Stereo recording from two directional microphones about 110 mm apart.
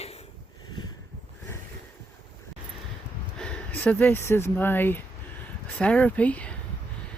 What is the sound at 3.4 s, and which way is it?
Speech, 10° left (ahead or behind).